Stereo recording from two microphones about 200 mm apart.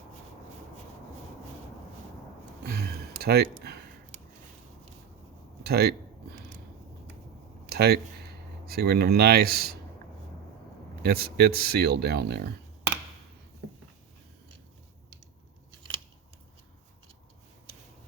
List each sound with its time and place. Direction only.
2.6 s a sound: 50° right (ahead or behind)
5.6 s speech: 50° right (ahead or behind)
7.7 s speech: 50° right (ahead or behind)
11.0 s speech: 50° right (ahead or behind)